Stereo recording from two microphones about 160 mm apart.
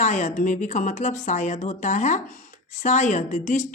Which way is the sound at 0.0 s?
50° left (ahead or behind).